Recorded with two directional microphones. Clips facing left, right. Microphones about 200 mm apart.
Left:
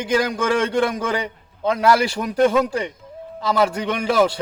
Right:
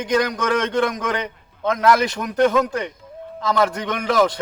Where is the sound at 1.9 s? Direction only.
10° left (ahead or behind).